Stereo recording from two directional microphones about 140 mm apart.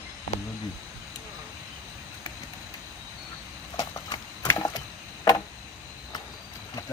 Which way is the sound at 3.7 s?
30° left (ahead or behind).